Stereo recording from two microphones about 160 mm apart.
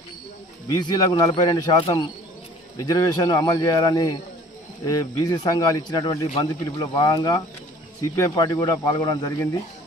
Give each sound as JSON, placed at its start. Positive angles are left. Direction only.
{"t": 0.7, "sound": "speech", "side_deg": 25}